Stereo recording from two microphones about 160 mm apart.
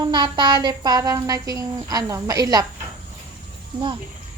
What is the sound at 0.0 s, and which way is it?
A woman's voice, 25° right (ahead or behind).